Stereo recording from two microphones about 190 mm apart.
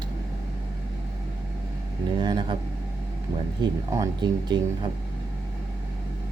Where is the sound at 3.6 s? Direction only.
20° right (ahead or behind).